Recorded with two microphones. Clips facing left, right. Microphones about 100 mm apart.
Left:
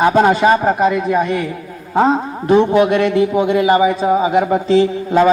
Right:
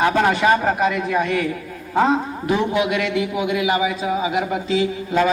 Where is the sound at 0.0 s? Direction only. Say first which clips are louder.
Left 5 dB; 25° left (ahead or behind).